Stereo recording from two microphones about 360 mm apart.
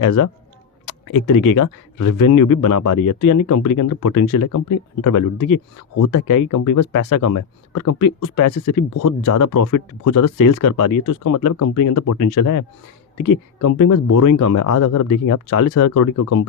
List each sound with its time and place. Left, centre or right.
0.0 s speech: left